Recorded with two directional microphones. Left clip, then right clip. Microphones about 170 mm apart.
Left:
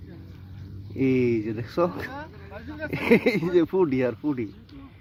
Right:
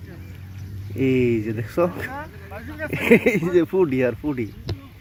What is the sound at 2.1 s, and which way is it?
Vehicle, 35° left (ahead or behind).